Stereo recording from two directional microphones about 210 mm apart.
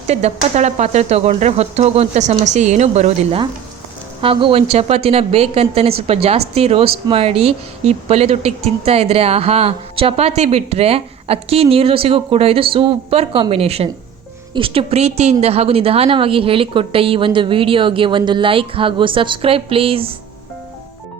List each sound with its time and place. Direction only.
0.1 s speech: 30° right (ahead or behind)